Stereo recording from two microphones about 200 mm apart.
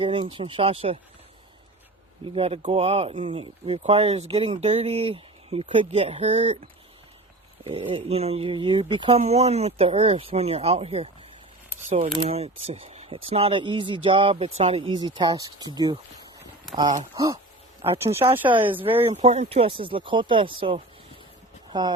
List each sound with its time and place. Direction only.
0.0 s speech: 25° right (ahead or behind)
2.3 s speech: 30° right (ahead or behind)
7.6 s speech: 30° right (ahead or behind)
12.1 s speech: 30° right (ahead or behind)
16.7 s speech: centre (ahead or behind)
17.2 s speech: 15° right (ahead or behind)
18.4 s speech: 25° right (ahead or behind)